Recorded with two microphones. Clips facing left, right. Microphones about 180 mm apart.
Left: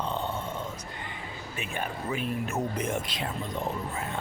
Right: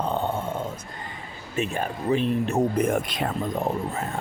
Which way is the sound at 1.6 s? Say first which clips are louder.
Right 8 dB; 35° right (ahead or behind).